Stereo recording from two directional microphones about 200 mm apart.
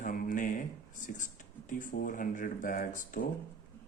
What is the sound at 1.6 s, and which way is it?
Speech, 40° left (ahead or behind).